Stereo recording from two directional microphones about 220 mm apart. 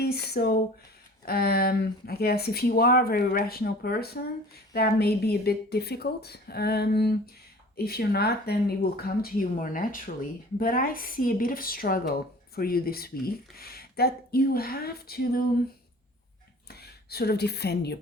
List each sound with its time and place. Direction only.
0.0 s speech: 45° left (ahead or behind)
16.6 s speech: 45° left (ahead or behind)